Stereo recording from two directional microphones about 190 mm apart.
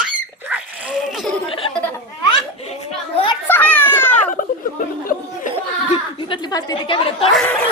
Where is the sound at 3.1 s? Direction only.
25° left (ahead or behind).